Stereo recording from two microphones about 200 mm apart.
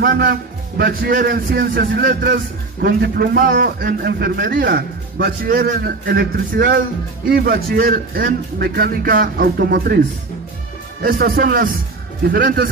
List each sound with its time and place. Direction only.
0.2 s a man's voice: 50° right (ahead or behind)